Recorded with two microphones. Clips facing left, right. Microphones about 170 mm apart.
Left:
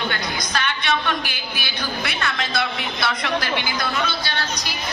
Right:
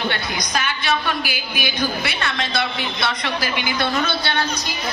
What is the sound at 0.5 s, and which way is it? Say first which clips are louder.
A woman's voice: right 1 dB; 5° right (ahead or behind).